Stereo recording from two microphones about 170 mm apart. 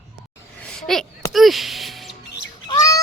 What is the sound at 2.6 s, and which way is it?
Bird, 25° left (ahead or behind).